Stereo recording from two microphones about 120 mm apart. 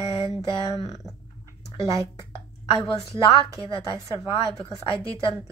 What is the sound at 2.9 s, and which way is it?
A woman's voice, 45° left (ahead or behind).